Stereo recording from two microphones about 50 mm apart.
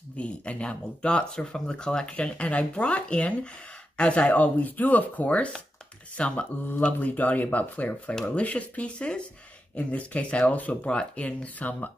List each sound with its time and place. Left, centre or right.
0.2 s speech: left
4.3 s speech: left
6.9 s speech: left